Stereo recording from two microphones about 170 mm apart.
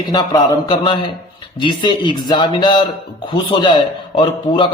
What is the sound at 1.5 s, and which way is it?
A man's voice, 25° left (ahead or behind).